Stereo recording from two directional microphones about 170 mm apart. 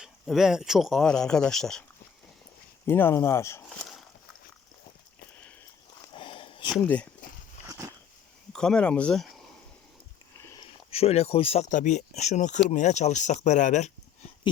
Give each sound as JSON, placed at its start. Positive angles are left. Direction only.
{"t": 0.0, "sound": "speech", "side_deg": 0}
{"t": 2.8, "sound": "speech", "side_deg": 15}
{"t": 3.7, "sound": "boat", "side_deg": 0}
{"t": 6.1, "sound": "a sound", "side_deg": 30}
{"t": 6.7, "sound": "speech", "side_deg": 5}
{"t": 8.5, "sound": "speech", "side_deg": 5}
{"t": 10.9, "sound": "speech", "side_deg": 35}